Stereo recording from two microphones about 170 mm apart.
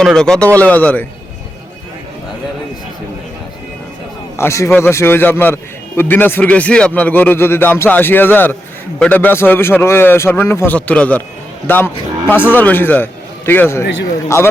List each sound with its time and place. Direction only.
0.0 s speech: centre (ahead or behind)
4.4 s speech: 15° left (ahead or behind)